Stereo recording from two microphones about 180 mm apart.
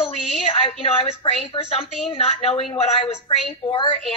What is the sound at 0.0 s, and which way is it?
A woman's voice, 35° left (ahead or behind).